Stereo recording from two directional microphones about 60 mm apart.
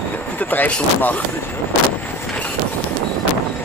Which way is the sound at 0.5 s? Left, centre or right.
Left.